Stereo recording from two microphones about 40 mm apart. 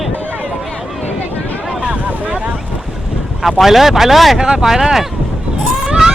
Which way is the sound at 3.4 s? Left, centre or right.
Centre.